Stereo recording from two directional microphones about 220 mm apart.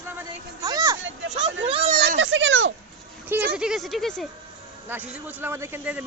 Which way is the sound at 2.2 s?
55° right (ahead or behind).